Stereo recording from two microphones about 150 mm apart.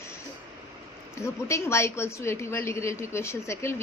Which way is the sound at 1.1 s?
20° left (ahead or behind).